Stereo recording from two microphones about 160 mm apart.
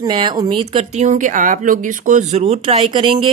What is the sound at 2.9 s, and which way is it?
Speech, 30° right (ahead or behind).